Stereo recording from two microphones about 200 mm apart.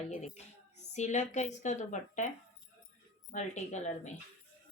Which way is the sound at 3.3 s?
35° left (ahead or behind).